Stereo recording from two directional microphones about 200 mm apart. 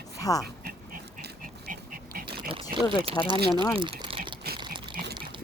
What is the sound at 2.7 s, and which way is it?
Speech, 25° right (ahead or behind).